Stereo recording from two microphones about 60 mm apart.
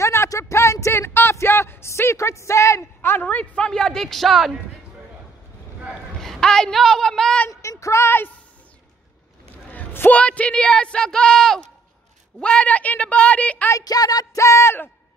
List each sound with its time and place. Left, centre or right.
0.0 s a sound: left
3.0 s a sound: left
3.3 s speech: left; by 4.5 s centre
6.2 s speech: centre
7.6 s speech: left
9.7 s a sound: left
10.1 s a woman's voice: left
13.7 s speech: left
14.4 s speech: left